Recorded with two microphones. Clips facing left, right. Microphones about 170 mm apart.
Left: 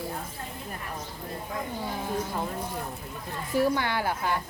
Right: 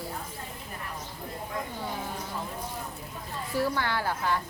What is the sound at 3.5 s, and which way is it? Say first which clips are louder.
Speech: left 3 dB; 15° left (ahead or behind).